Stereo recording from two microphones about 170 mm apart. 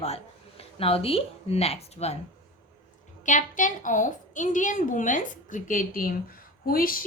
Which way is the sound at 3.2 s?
45° left (ahead or behind).